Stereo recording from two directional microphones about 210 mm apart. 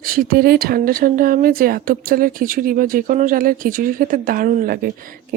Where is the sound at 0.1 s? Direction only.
45° right (ahead or behind).